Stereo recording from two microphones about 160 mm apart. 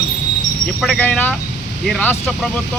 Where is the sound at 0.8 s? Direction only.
5° left (ahead or behind).